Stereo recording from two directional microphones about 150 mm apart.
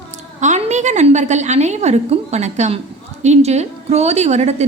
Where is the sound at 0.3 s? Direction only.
50° right (ahead or behind).